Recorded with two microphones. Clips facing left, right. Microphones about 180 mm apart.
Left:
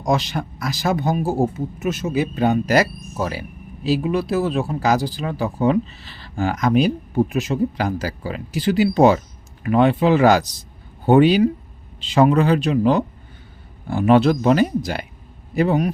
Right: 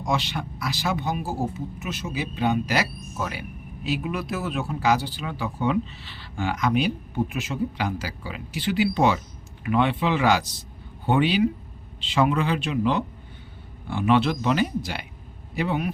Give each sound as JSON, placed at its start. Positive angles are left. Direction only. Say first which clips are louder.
{"t": 0.0, "sound": "speech", "louder": "left 6 dB", "side_deg": 40}